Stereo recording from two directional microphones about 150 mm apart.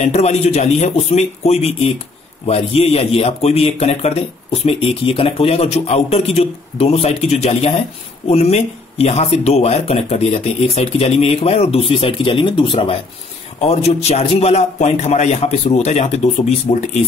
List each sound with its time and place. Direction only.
0.0 s a man's voice: 45° left (ahead or behind)
13.7 s a man's voice: 45° left (ahead or behind)